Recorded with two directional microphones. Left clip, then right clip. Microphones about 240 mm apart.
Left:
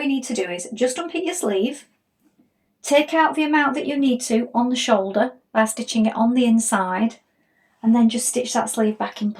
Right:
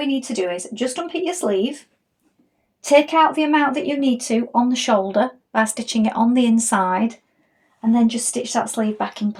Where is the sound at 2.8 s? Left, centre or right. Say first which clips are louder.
Right 3 dB; right.